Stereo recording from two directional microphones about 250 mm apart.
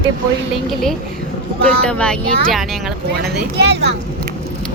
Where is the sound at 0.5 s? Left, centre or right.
Centre.